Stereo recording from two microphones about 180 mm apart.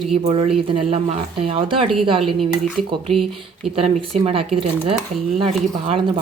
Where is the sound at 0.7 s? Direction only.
35° right (ahead or behind).